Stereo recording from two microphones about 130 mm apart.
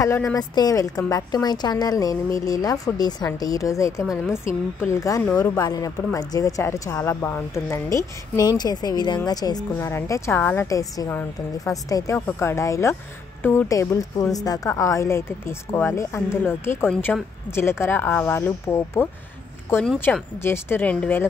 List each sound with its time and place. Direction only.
0.0 s speech: 25° left (ahead or behind)
20.1 s speech: 20° left (ahead or behind)